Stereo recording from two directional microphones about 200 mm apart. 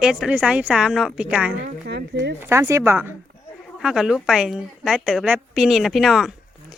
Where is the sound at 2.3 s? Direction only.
10° right (ahead or behind).